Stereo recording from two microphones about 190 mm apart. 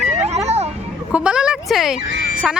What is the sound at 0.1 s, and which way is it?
Vehicle, 35° right (ahead or behind).